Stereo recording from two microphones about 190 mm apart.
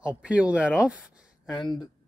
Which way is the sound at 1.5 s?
20° left (ahead or behind).